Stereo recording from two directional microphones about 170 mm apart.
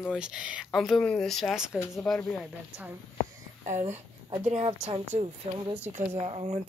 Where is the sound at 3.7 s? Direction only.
45° right (ahead or behind).